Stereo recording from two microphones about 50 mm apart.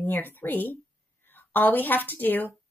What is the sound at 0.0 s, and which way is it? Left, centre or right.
A woman's voice, left.